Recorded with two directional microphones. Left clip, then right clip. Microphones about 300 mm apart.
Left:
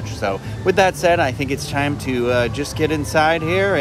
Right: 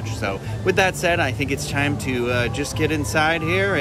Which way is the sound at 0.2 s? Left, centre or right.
Centre.